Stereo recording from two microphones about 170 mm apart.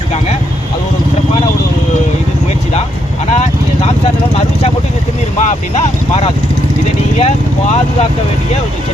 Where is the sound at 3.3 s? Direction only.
40° left (ahead or behind).